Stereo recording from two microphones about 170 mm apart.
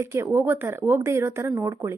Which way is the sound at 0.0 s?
15° right (ahead or behind).